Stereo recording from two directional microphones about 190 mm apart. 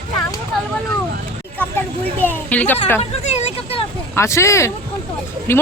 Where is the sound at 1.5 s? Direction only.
10° left (ahead or behind).